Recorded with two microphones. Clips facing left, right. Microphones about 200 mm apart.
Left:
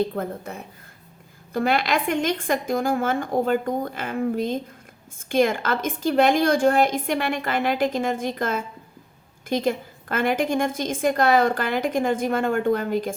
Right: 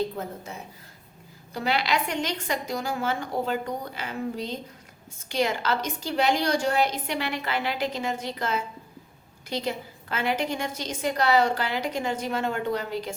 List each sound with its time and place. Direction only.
0.2 s a woman's voice: 55° left (ahead or behind)